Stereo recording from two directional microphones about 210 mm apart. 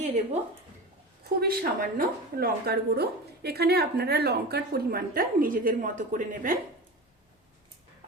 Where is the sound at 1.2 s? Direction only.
45° right (ahead or behind).